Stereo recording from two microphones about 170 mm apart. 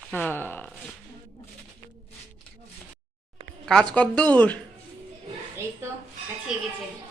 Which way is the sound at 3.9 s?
5° left (ahead or behind).